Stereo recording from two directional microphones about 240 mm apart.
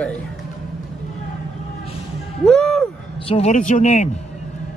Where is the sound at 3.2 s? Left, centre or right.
Left.